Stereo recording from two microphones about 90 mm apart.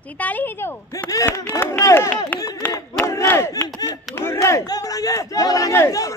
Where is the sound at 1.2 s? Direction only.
25° left (ahead or behind).